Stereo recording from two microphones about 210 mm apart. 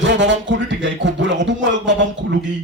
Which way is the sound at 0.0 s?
60° right (ahead or behind).